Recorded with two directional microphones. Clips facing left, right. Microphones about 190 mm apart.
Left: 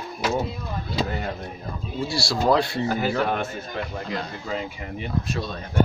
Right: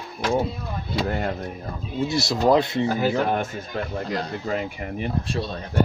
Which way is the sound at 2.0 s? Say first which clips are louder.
Right 2 dB; 20° right (ahead or behind).